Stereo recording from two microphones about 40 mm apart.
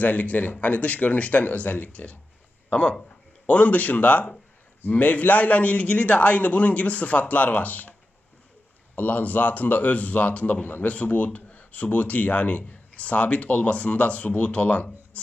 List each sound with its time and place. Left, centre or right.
0.0 s speech: left
9.0 s speech: left